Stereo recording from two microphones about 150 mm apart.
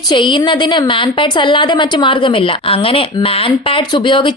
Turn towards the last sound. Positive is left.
turn(degrees=30)  # may be behind; listen again after turning